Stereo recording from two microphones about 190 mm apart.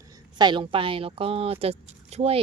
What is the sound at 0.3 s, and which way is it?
Speech, 25° right (ahead or behind).